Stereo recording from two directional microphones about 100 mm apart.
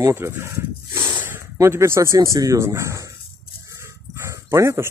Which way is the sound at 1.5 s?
30° right (ahead or behind).